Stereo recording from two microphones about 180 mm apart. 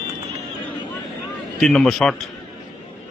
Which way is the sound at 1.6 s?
Centre (ahead or behind).